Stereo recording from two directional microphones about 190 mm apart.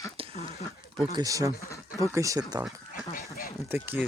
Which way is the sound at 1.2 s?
15° right (ahead or behind).